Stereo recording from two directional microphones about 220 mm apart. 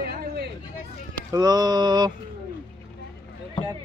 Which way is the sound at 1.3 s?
20° right (ahead or behind).